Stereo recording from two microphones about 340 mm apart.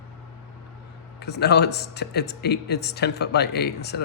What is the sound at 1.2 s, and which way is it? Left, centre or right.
Speech, left.